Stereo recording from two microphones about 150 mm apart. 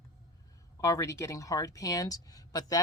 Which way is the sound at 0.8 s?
20° left (ahead or behind).